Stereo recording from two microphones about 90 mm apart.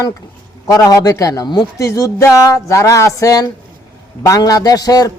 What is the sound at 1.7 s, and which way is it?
Speech, 35° left (ahead or behind).